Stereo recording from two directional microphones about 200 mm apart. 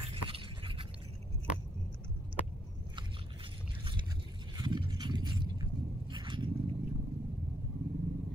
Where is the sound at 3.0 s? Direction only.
25° right (ahead or behind).